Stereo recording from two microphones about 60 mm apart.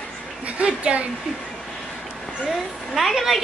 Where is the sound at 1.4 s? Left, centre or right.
Centre.